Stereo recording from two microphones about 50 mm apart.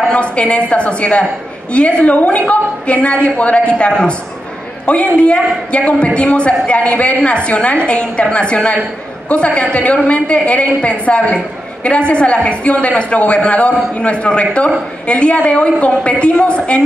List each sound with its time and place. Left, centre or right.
0.1 s a woman's voice: left